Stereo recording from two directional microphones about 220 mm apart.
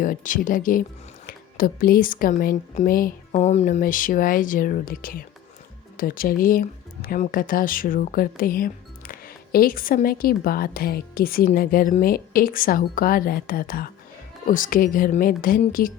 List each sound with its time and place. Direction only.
0.0 s speech: 35° left (ahead or behind)